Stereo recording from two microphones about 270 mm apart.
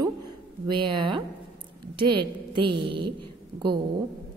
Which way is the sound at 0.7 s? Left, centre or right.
Centre.